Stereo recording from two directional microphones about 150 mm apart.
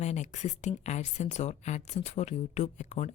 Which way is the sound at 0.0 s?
50° left (ahead or behind).